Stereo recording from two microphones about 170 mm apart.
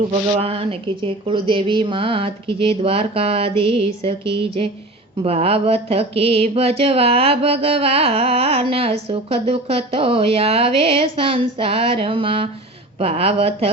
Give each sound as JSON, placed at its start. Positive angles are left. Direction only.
{"t": 0.1, "sound": "speech", "side_deg": -35}